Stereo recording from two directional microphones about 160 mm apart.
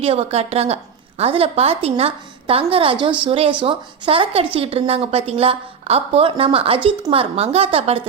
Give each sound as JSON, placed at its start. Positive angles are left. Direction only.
{"t": 0.0, "sound": "a woman's voice", "side_deg": -40}